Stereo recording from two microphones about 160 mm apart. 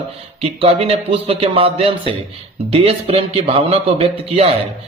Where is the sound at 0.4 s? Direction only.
35° right (ahead or behind).